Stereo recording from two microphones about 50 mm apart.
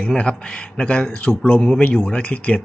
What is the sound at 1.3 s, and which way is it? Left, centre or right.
Speech, left.